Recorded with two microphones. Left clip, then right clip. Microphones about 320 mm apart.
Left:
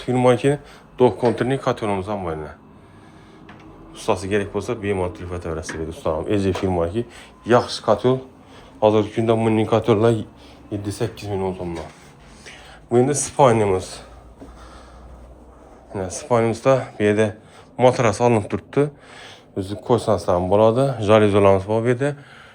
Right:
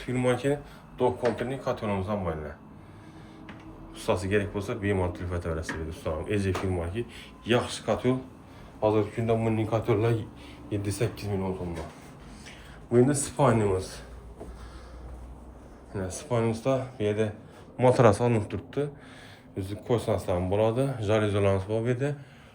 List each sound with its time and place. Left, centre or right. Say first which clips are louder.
0.0 s speech: left 10 dB; centre
3.9 s speech: left 6 dB; centre
12.5 s speech: left 7 dB; centre
15.9 s speech: left 10 dB; centre
17.7 s speech: left 5 dB; centre; by 22.1 s left